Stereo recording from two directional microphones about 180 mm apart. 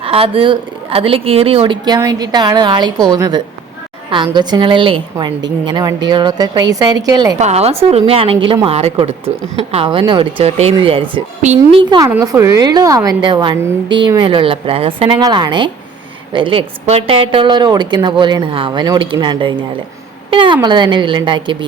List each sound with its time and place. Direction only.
0.0 s a woman's voice: 30° right (ahead or behind)
7.3 s a woman's voice: 35° right (ahead or behind)